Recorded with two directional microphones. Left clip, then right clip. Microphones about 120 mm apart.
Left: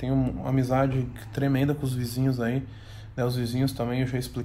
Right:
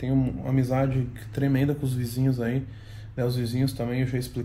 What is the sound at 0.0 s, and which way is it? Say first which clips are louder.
Speech: even; 30° left (ahead or behind).